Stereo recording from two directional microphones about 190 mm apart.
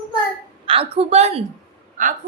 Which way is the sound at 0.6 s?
30° right (ahead or behind).